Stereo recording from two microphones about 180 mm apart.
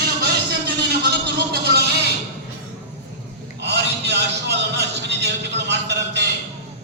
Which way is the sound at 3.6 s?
70° right (ahead or behind).